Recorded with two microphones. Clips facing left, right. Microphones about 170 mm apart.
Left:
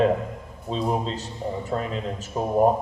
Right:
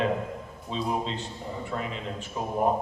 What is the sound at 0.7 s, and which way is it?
Speech, 40° left (ahead or behind).